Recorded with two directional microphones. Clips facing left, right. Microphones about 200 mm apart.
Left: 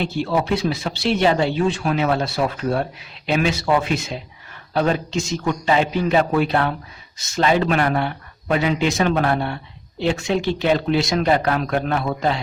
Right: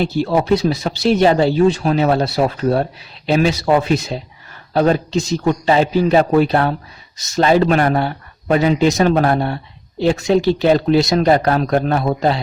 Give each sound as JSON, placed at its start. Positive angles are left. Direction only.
{"t": 0.0, "sound": "speech", "side_deg": -40}